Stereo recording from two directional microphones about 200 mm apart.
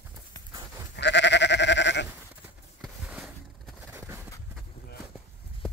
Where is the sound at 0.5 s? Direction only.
15° right (ahead or behind).